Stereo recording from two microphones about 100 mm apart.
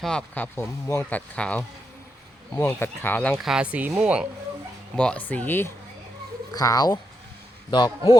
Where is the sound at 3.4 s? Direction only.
10° right (ahead or behind).